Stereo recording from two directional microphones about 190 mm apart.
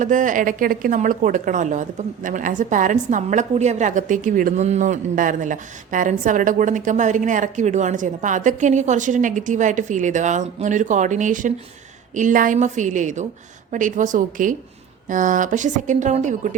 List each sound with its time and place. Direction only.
0.0 s a woman's voice: 40° right (ahead or behind)